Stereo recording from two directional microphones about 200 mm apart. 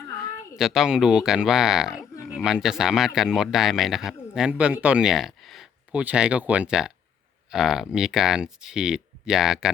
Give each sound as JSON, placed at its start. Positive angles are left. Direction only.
{"t": 0.5, "sound": "speech", "side_deg": 0}